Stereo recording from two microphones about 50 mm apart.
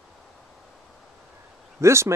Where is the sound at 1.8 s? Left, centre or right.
Right.